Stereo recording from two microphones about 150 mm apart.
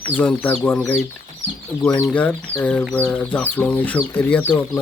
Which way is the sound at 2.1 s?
10° left (ahead or behind).